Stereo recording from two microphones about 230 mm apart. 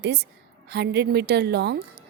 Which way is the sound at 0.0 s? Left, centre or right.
Right.